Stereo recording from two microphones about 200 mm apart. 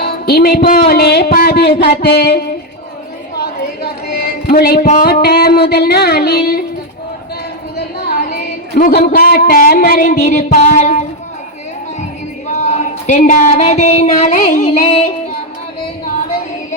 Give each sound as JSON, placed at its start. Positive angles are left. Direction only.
{"t": 0.0, "sound": "speech", "side_deg": 50}
{"t": 3.3, "sound": "a sound", "side_deg": 50}
{"t": 4.9, "sound": "speech", "side_deg": 40}
{"t": 8.4, "sound": "a sound", "side_deg": 50}
{"t": 9.1, "sound": "speech", "side_deg": 50}
{"t": 12.5, "sound": "speech", "side_deg": 35}